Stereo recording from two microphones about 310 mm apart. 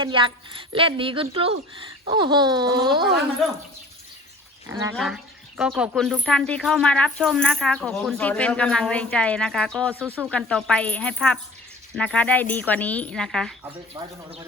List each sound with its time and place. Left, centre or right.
0.0 s speech: centre
4.7 s speech: centre